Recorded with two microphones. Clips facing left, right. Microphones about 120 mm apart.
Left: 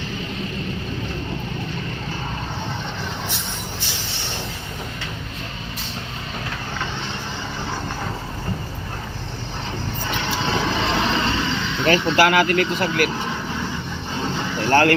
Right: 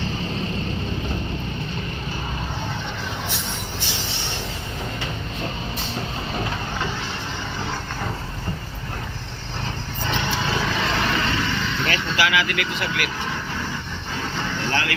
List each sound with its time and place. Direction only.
10.4 s vehicle: 25° left (ahead or behind)
12.1 s speech: 50° left (ahead or behind)
14.2 s vehicle: 15° left (ahead or behind)
14.7 s speech: 45° left (ahead or behind)